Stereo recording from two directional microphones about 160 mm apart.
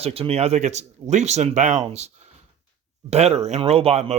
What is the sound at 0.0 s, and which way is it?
Speech, 40° right (ahead or behind).